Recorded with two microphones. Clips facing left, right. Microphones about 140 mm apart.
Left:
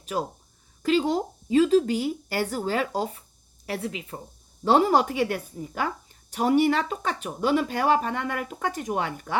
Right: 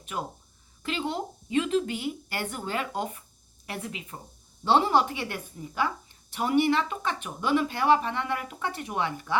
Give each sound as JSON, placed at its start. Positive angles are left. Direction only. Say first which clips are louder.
{"t": 0.9, "sound": "speech", "louder": "left 8 dB", "side_deg": 40}